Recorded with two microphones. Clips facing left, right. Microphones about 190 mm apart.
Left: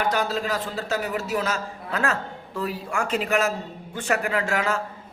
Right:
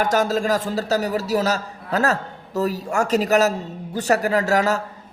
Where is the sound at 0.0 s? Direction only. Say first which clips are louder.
Right 5 dB; 45° right (ahead or behind).